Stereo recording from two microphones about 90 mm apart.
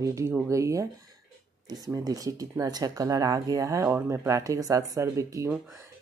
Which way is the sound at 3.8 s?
30° right (ahead or behind).